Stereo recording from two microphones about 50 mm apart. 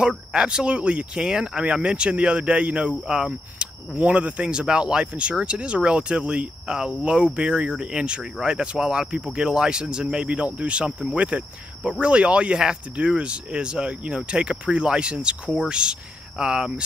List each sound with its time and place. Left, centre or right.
0.3 s speech: centre
3.9 s speech: right; by 16.8 s centre